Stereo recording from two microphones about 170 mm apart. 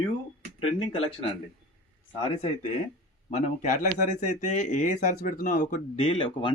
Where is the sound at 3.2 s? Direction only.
40° left (ahead or behind).